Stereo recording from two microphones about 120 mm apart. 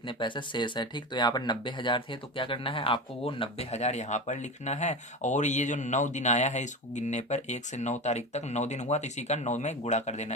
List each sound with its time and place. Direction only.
0.1 s speech: 40° left (ahead or behind); by 10.3 s 70° left (ahead or behind)